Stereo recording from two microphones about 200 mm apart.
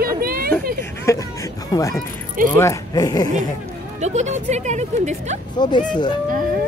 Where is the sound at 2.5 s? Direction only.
15° left (ahead or behind).